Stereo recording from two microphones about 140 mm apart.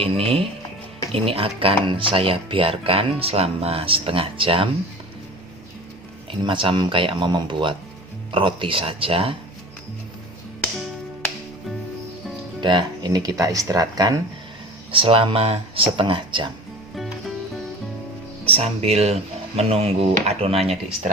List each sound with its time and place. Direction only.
0.0 s speech: 45° right (ahead or behind)
6.4 s speech: 35° right (ahead or behind)
12.5 s speech: 35° right (ahead or behind)
14.9 s speech: 40° right (ahead or behind)
16.9 s music: centre (ahead or behind)
18.4 s speech: 45° right (ahead or behind)